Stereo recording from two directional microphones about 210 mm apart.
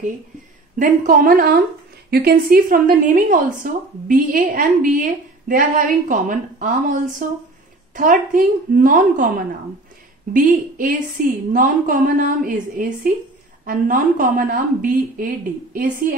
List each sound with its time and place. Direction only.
0.7 s a woman's voice: 40° right (ahead or behind)
10.3 s a woman's voice: 40° right (ahead or behind)